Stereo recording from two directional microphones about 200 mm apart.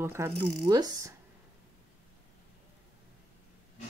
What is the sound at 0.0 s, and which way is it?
Speech, 10° right (ahead or behind).